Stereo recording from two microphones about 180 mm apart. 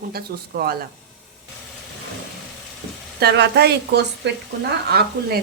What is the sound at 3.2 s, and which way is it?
Speech, 65° right (ahead or behind).